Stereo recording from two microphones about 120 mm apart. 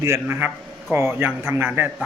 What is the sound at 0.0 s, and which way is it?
A man's voice, 20° right (ahead or behind).